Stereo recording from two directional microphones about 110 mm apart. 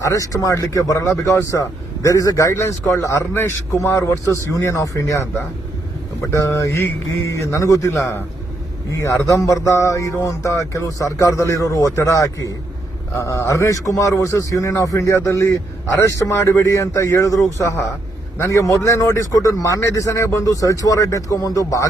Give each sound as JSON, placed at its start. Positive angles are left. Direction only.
{"t": 0.0, "sound": "a man's voice", "side_deg": 30}
{"t": 6.3, "sound": "a man's voice", "side_deg": 30}